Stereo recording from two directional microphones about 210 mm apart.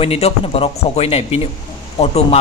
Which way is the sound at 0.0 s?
30° left (ahead or behind).